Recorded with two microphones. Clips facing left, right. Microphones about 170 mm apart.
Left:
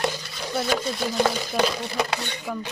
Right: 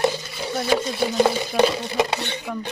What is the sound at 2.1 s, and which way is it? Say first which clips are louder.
Speech: right 3 dB; 20° right (ahead or behind).